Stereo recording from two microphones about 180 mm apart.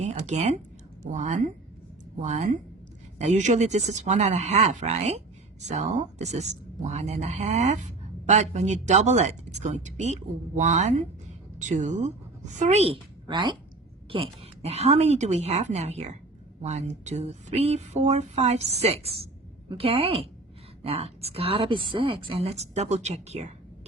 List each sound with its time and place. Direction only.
0.0 s speech: 40° right (ahead or behind)